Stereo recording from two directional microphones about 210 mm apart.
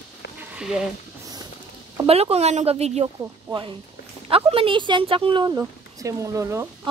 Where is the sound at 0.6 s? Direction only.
5° right (ahead or behind).